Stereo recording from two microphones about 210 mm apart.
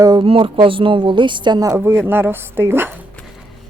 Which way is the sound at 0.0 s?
20° right (ahead or behind).